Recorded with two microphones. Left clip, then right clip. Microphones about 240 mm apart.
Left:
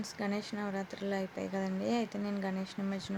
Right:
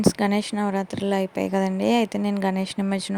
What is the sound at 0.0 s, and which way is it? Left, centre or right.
A woman's voice, right.